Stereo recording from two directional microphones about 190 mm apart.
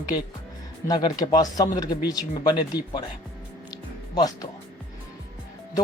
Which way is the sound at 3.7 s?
20° left (ahead or behind).